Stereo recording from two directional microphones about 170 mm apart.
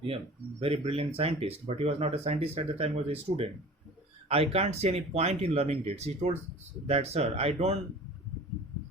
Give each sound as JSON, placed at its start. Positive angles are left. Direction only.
{"t": 0.6, "sound": "speech", "side_deg": -35}
{"t": 4.5, "sound": "speech", "side_deg": -35}